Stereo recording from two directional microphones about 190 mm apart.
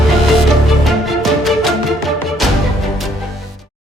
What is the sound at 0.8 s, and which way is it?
Music, centre (ahead or behind).